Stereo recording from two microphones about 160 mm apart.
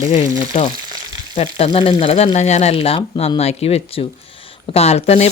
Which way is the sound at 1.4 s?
40° left (ahead or behind).